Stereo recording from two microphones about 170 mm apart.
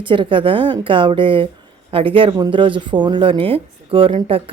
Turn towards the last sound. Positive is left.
turn(degrees=-30)  # may be behind; listen again after turning